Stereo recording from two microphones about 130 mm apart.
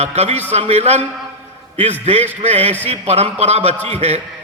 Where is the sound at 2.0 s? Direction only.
55° right (ahead or behind).